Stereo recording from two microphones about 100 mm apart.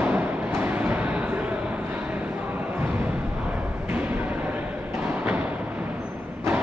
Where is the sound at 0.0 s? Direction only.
15° right (ahead or behind).